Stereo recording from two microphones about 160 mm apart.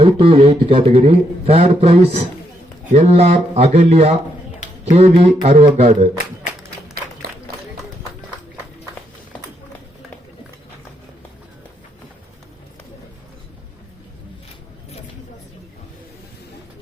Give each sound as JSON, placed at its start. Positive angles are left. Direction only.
{"t": 0.0, "sound": "a man's voice", "side_deg": -35}